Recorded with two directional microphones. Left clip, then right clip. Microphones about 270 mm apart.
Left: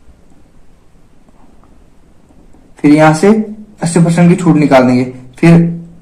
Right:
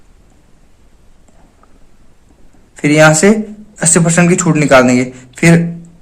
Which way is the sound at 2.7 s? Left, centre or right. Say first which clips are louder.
Even; right.